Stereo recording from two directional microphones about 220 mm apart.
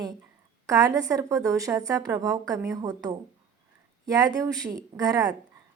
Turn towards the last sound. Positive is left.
turn(degrees=-15)  # may be behind; listen again after turning